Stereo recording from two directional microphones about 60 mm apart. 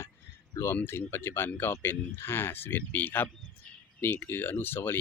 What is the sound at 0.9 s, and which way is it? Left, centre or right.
Speech, left.